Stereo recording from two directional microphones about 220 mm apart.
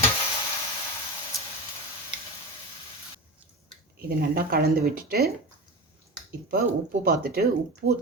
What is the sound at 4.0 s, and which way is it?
Speech, 45° right (ahead or behind).